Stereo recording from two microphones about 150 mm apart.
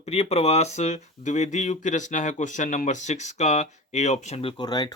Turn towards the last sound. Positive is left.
turn(degrees=25)  # may be behind; listen again after turning